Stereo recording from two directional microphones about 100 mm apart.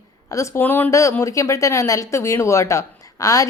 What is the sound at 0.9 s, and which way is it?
A woman's voice, 30° left (ahead or behind).